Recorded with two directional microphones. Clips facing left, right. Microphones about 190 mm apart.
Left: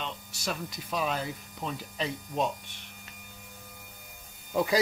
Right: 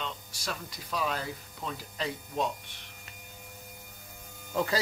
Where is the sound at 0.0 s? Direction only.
20° left (ahead or behind).